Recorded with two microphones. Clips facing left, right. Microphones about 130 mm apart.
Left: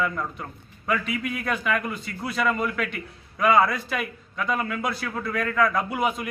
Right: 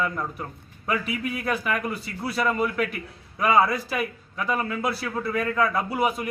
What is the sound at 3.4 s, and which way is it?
A man's voice, 10° right (ahead or behind).